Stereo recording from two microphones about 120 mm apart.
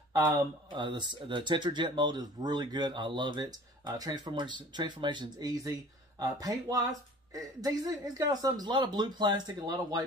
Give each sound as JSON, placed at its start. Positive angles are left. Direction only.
{"t": 0.7, "sound": "speech", "side_deg": -40}